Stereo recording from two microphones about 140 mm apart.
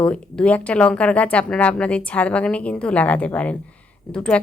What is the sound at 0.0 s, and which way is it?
A woman's voice, 10° left (ahead or behind).